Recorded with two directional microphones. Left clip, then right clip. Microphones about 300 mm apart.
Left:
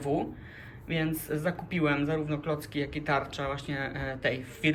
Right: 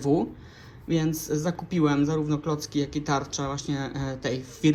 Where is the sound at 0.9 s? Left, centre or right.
Centre.